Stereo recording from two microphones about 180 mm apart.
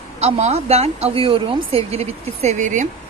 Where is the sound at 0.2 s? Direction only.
35° right (ahead or behind).